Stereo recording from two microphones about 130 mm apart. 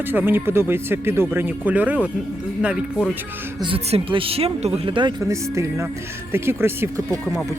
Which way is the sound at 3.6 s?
45° right (ahead or behind).